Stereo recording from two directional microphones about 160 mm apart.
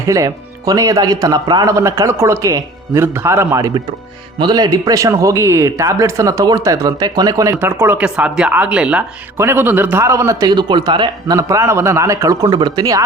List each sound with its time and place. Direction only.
0.0 s speech: 20° right (ahead or behind)